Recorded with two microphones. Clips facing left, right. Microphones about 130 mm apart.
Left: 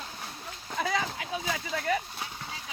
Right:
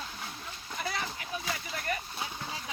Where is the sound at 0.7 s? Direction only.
90° left.